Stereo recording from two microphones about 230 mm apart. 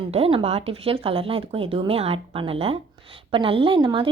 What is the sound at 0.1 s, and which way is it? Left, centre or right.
Speech, right.